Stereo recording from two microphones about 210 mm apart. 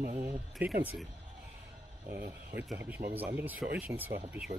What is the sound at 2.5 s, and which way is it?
Speech, 10° right (ahead or behind).